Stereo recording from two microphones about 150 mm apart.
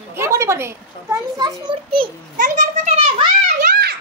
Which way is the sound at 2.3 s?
55° right (ahead or behind).